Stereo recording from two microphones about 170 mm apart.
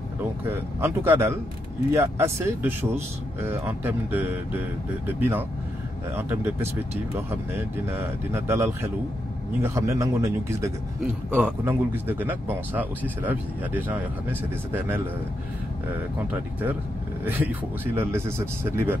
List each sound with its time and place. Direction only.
0.5 s speech: 15° right (ahead or behind)
17.2 s speech: 10° right (ahead or behind)